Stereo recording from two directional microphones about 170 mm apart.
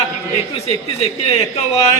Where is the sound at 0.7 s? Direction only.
35° left (ahead or behind).